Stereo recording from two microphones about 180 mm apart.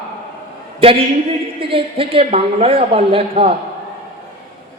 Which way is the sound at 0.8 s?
30° right (ahead or behind).